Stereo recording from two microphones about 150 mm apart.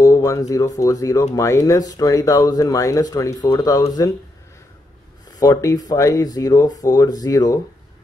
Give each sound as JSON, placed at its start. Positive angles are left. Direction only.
{"t": 0.0, "sound": "speech", "side_deg": 20}
{"t": 5.3, "sound": "speech", "side_deg": 25}